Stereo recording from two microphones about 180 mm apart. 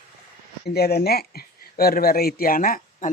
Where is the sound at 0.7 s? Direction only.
60° left (ahead or behind).